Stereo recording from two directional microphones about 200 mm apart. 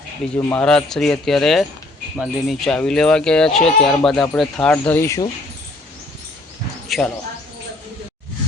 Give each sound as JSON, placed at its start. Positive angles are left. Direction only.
{"t": 0.3, "sound": "speech", "side_deg": 5}
{"t": 3.6, "sound": "speech", "side_deg": 40}
{"t": 3.8, "sound": "speech", "side_deg": 0}
{"t": 6.8, "sound": "a sound", "side_deg": 0}